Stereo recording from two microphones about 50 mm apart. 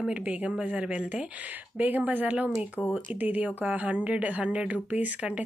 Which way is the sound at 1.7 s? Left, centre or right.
Right.